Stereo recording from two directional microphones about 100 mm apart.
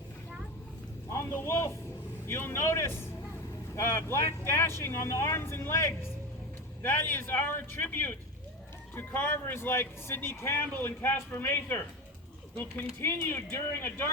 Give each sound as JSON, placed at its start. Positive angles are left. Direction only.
{"t": 1.1, "sound": "speech", "side_deg": 25}
{"t": 13.0, "sound": "speech", "side_deg": 25}